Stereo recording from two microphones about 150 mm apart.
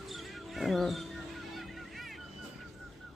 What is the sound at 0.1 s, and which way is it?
Music, centre (ahead or behind).